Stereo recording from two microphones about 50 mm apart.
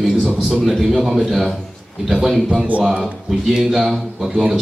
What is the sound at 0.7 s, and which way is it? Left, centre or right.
A man's voice, centre.